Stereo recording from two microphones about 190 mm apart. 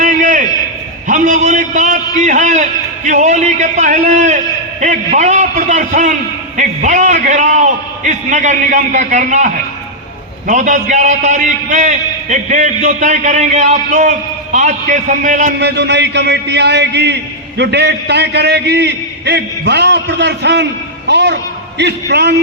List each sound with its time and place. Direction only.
0.0 s a sound: 45° right (ahead or behind)
1.0 s a man's voice: 40° right (ahead or behind)
15.5 s a man's voice: 65° right (ahead or behind)